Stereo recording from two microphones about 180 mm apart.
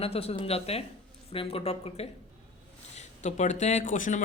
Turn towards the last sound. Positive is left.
turn(degrees=45)  # may be behind; listen again after turning